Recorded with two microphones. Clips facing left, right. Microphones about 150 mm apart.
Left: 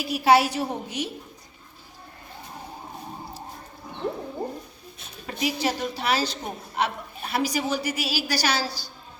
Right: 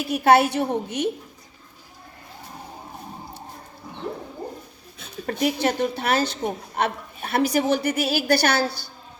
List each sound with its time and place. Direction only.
0.0 s a woman's voice: 55° right (ahead or behind)
5.2 s a woman's voice: 55° right (ahead or behind)